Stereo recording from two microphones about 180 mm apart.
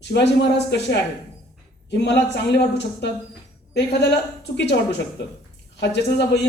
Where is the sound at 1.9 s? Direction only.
70° left (ahead or behind).